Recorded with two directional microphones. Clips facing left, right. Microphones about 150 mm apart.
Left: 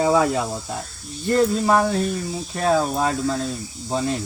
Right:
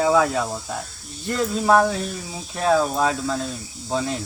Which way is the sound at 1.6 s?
Centre (ahead or behind).